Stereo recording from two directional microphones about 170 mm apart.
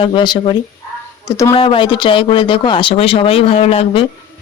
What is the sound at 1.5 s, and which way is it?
Speech, 30° left (ahead or behind).